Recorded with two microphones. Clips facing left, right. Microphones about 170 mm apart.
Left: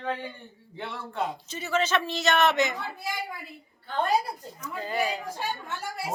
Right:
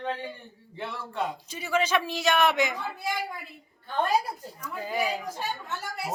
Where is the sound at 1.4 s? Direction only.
10° right (ahead or behind).